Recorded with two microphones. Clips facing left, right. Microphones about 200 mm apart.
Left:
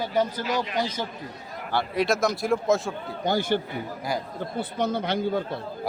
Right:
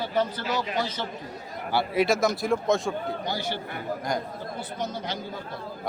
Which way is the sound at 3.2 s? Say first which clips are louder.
Left 7 dB; 50° left (ahead or behind).